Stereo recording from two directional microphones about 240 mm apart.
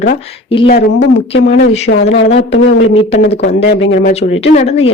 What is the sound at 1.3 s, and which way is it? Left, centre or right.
Speech, left.